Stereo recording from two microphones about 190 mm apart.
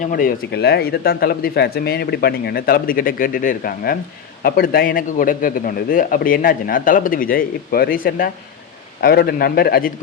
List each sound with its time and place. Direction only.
0.0 s a man's voice: 50° left (ahead or behind)